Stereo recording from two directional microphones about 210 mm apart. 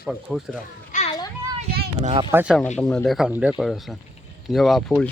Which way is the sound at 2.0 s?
25° right (ahead or behind).